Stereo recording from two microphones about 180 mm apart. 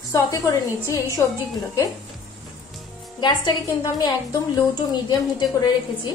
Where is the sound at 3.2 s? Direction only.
25° left (ahead or behind).